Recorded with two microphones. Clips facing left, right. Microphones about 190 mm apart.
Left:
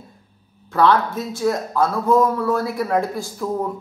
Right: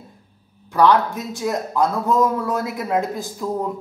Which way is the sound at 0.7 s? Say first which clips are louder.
Right 1 dB; 15° right (ahead or behind).